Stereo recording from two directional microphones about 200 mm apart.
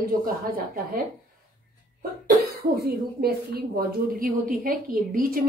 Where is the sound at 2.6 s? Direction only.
50° right (ahead or behind).